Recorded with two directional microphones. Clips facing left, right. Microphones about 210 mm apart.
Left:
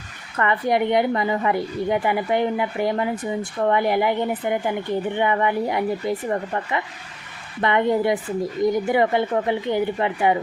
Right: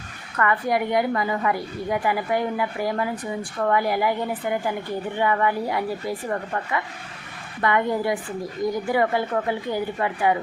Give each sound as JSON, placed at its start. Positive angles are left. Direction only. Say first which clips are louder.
{"t": 0.3, "sound": "a woman's voice", "louder": "left 2 dB", "side_deg": 25}